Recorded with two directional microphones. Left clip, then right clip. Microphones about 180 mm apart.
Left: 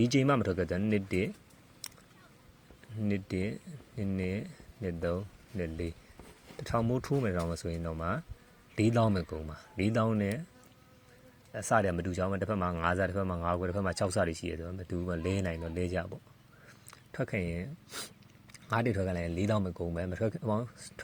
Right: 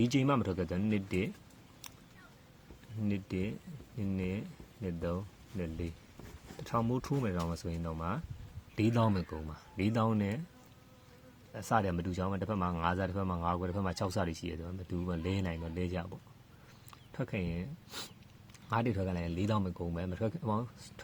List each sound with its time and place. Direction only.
0.0 s speech: 20° left (ahead or behind)
3.1 s a man's voice: 20° left (ahead or behind)
11.5 s a man's voice: 20° left (ahead or behind)